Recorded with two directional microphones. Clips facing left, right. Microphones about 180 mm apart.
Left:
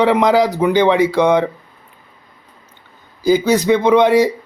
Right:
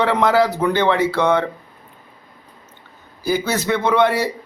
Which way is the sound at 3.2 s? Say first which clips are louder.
Left 7 dB; 15° left (ahead or behind).